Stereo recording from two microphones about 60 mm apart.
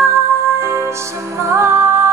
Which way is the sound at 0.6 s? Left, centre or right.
Right.